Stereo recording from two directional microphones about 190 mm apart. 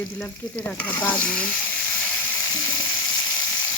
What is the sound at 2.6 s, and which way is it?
Frying, 25° left (ahead or behind).